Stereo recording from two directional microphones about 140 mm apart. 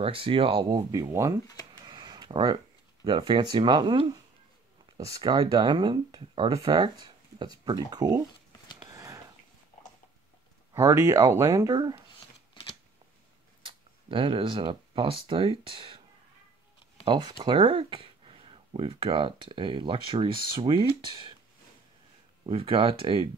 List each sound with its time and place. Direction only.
0.0 s speech: 40° right (ahead or behind)
0.9 s speech: 25° right (ahead or behind)
1.7 s a sound: 30° right (ahead or behind)
3.0 s speech: 35° right (ahead or behind)
8.9 s a sound: 20° right (ahead or behind)
10.7 s speech: 20° right (ahead or behind)
12.6 s typewriter: 35° left (ahead or behind)
13.6 s speech: 35° right (ahead or behind)
17.0 s speech: 35° right (ahead or behind)
22.5 s speech: 40° right (ahead or behind)